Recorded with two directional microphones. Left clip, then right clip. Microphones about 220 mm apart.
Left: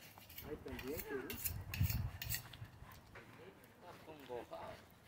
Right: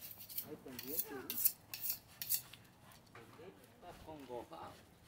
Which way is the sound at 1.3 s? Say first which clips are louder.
Right 1 dB; 35° right (ahead or behind).